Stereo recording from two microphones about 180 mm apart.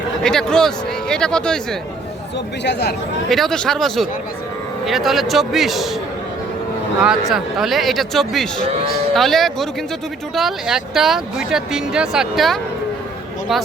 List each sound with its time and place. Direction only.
0.2 s speech: 5° left (ahead or behind)
2.6 s speech: 70° left (ahead or behind)
3.2 s speech: centre (ahead or behind)
7.0 s speech: 5° right (ahead or behind)